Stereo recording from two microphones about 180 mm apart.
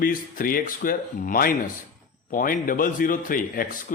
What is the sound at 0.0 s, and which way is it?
Speech, 50° left (ahead or behind).